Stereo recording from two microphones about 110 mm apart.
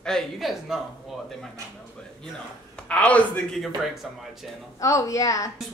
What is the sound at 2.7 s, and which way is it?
Speech, 10° left (ahead or behind).